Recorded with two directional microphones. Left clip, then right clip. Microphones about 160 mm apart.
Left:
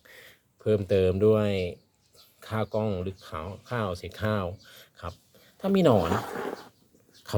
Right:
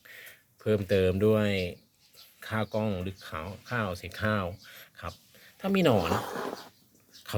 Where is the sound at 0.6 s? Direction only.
5° left (ahead or behind).